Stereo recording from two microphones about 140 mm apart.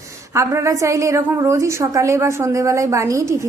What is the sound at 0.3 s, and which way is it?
A woman's voice, 20° right (ahead or behind).